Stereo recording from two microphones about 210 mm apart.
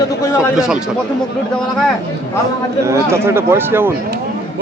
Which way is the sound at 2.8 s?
15° right (ahead or behind).